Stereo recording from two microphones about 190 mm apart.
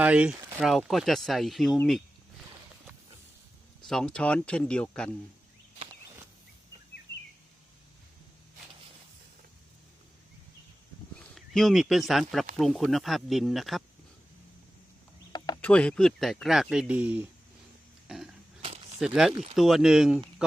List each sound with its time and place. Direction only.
0.0 s speech: 5° right (ahead or behind)
3.8 s speech: 5° left (ahead or behind)
11.2 s speech: centre (ahead or behind)
15.3 s a sound: 20° left (ahead or behind)
15.6 s speech: 5° left (ahead or behind)
18.1 s a sound: centre (ahead or behind)
18.9 s speech: centre (ahead or behind)